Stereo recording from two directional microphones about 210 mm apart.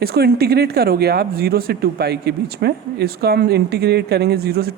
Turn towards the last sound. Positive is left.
turn(degrees=-50)  # may be behind; listen again after turning